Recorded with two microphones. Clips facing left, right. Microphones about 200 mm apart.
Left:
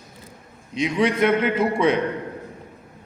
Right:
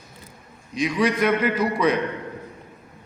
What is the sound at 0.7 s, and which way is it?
A man's voice, 25° left (ahead or behind).